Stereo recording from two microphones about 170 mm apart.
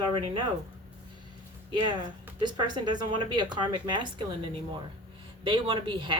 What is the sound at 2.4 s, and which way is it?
Speech, 25° right (ahead or behind).